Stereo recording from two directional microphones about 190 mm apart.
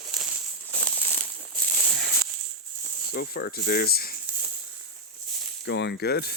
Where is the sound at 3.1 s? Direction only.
60° left (ahead or behind).